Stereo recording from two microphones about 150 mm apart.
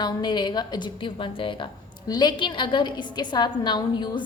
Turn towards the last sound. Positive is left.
turn(degrees=30)  # may be behind; listen again after turning